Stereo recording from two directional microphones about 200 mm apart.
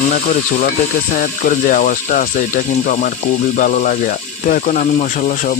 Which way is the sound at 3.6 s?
40° left (ahead or behind).